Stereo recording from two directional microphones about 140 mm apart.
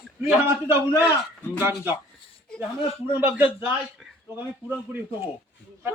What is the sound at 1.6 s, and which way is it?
Speech, 15° right (ahead or behind).